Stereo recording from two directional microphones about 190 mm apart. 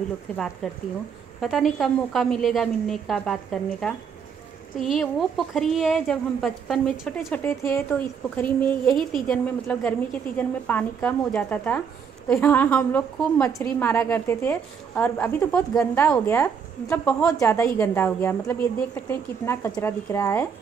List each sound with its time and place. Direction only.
1.4 s a woman's voice: centre (ahead or behind)